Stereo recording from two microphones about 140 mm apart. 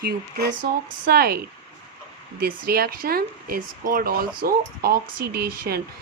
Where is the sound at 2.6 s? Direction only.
90° right.